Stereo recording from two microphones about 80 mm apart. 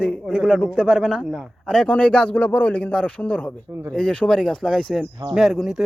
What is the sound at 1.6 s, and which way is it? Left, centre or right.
A man's voice, centre.